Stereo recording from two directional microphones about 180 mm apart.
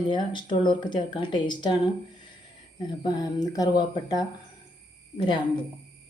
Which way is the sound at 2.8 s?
25° left (ahead or behind).